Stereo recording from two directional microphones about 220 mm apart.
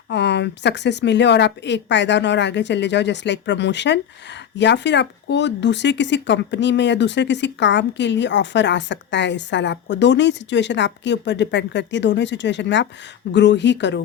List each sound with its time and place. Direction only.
0.1 s speech: 50° left (ahead or behind)